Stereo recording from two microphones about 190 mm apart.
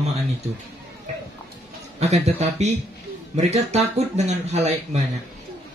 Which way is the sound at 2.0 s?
35° right (ahead or behind).